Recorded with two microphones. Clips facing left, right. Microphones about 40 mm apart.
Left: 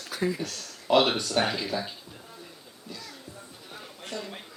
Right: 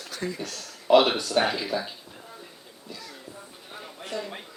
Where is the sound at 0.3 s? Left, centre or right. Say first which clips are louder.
Even; centre.